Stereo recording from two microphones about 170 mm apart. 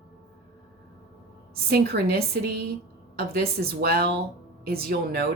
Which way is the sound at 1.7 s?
70° right (ahead or behind).